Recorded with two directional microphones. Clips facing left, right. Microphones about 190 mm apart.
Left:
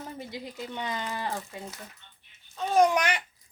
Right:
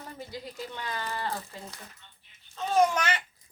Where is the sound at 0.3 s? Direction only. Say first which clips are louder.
Left 1 dB; 20° left (ahead or behind).